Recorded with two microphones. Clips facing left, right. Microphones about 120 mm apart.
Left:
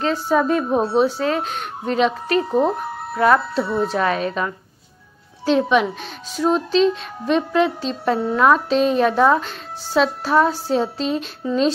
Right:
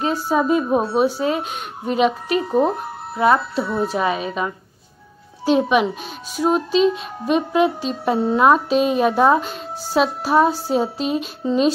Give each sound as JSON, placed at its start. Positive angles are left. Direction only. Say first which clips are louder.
{"t": 0.0, "sound": "a child's voice", "louder": "left 1 dB", "side_deg": -10}